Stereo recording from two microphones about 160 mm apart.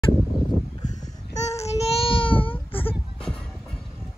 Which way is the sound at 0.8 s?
50° left (ahead or behind).